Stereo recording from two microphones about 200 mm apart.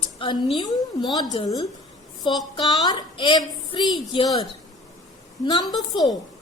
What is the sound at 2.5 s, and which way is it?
A woman's voice, 20° left (ahead or behind).